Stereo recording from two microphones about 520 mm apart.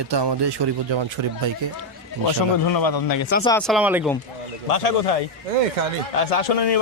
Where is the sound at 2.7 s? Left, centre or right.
Left.